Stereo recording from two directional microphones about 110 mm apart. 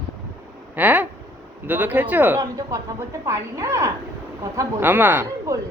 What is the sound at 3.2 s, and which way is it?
Speech, 25° right (ahead or behind).